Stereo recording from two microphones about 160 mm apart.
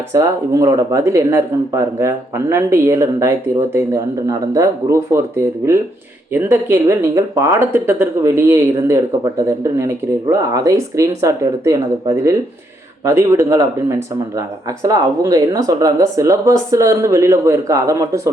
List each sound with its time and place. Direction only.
0.1 s speech: 20° right (ahead or behind)
14.8 s speech: 25° right (ahead or behind)